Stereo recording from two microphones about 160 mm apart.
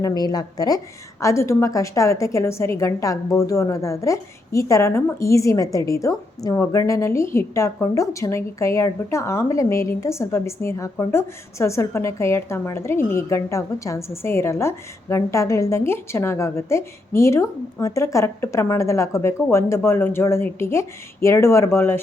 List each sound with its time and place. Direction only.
0.0 s a woman's voice: 25° left (ahead or behind)